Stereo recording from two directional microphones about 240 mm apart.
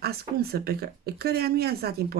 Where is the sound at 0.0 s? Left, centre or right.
Right.